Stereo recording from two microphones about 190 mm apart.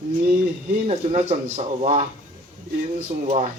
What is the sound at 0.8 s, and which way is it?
Speech, 35° right (ahead or behind).